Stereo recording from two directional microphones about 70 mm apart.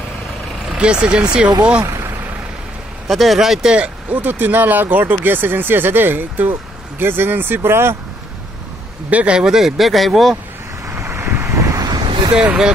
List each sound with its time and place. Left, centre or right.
0.7 s speech: centre
3.1 s speech: centre
3.7 s speech: centre
4.2 s speech: right
9.1 s speech: centre
10.9 s vehicle: right
11.8 s vehicle: right